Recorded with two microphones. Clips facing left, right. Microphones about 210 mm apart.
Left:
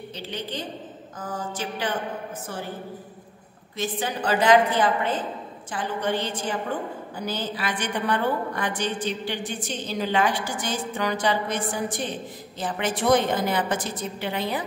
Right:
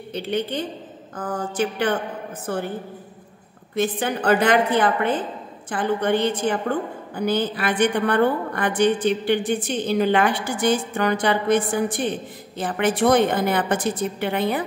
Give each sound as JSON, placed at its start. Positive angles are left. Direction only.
{"t": 0.1, "sound": "a woman's voice", "side_deg": -60}
{"t": 3.7, "sound": "a woman's voice", "side_deg": -55}